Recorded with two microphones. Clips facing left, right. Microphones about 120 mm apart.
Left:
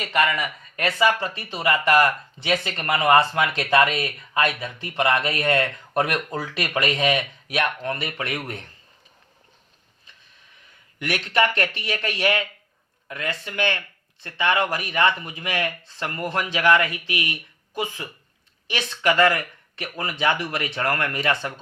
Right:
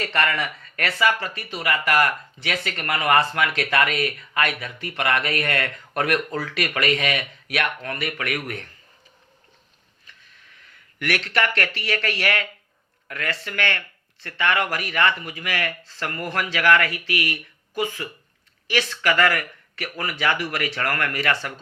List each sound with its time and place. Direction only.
0.0 s speech: 15° left (ahead or behind)
11.0 s speech: 20° left (ahead or behind)